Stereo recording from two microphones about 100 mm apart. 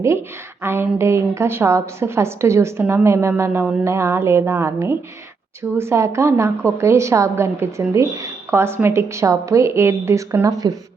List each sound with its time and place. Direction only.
0.0 s a woman's voice: 25° right (ahead or behind)